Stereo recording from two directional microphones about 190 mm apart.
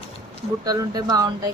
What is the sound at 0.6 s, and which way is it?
Speech, 20° right (ahead or behind).